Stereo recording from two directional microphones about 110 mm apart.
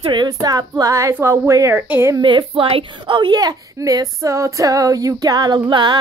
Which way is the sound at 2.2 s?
50° right (ahead or behind).